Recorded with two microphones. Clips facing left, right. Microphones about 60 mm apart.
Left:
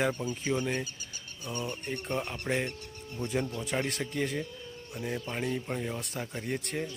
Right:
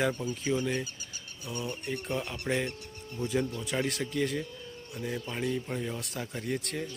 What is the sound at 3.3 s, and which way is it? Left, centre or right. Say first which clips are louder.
Speech: right 2 dB; centre.